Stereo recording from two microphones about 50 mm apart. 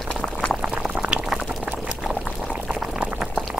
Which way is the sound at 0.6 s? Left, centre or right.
Centre.